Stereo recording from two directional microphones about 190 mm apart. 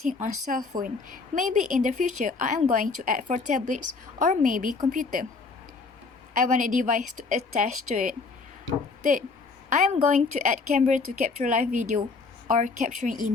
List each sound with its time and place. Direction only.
0.1 s a woman's voice: 40° right (ahead or behind)
6.3 s a woman's voice: 40° right (ahead or behind)
9.6 s a woman's voice: 40° right (ahead or behind)